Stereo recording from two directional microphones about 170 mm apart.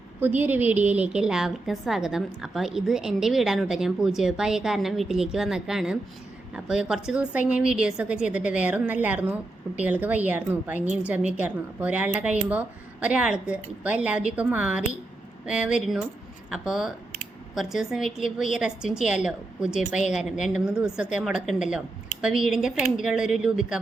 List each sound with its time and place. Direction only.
0.2 s a woman's voice: 10° right (ahead or behind)